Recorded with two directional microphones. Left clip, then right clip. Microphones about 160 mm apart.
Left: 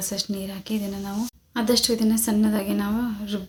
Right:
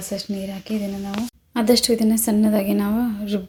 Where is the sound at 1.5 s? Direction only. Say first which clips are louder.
Right 4 dB; 30° right (ahead or behind).